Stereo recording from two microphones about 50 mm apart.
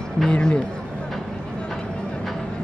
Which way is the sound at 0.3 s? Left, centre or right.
Centre.